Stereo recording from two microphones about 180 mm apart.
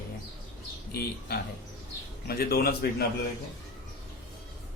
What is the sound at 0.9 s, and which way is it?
Speech, 60° left (ahead or behind).